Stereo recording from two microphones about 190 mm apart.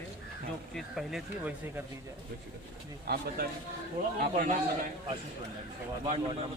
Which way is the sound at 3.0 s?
55° right (ahead or behind).